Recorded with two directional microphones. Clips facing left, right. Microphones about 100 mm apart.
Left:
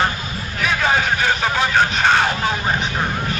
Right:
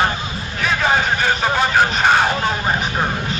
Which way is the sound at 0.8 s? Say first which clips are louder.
Right 1 dB; 5° right (ahead or behind).